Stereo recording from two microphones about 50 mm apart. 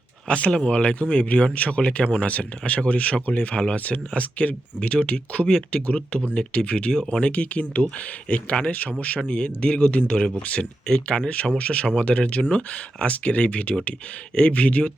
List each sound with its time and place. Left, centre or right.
0.3 s speech: left
10.8 s speech: centre
11.2 s speech: left